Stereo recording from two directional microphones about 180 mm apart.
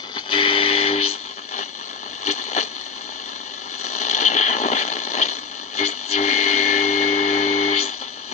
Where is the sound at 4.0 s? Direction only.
40° left (ahead or behind).